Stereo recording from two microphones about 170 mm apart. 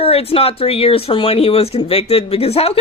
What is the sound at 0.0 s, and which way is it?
Speech, 35° left (ahead or behind).